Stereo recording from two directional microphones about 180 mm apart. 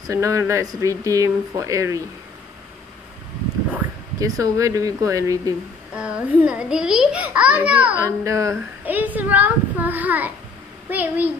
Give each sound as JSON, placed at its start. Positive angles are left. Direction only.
{"t": 0.0, "sound": "a woman's voice", "side_deg": -15}
{"t": 3.7, "sound": "speech", "side_deg": -20}
{"t": 5.9, "sound": "a child's voice", "side_deg": -5}